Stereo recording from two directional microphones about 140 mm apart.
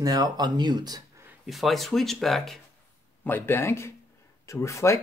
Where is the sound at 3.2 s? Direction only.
15° left (ahead or behind).